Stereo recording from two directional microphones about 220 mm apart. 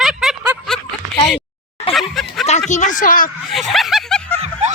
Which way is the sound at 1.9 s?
Centre (ahead or behind).